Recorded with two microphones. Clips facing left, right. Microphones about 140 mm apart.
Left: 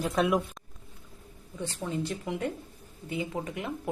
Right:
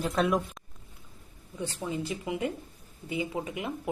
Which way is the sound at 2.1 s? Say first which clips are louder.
Right 1 dB; 5° right (ahead or behind).